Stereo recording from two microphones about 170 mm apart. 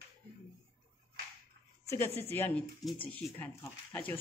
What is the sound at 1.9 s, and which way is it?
Speech, 15° left (ahead or behind).